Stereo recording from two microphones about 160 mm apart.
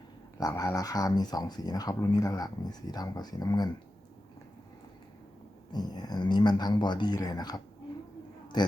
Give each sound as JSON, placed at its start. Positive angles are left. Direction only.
{"t": 0.3, "sound": "speech", "side_deg": 20}
{"t": 5.7, "sound": "speech", "side_deg": 25}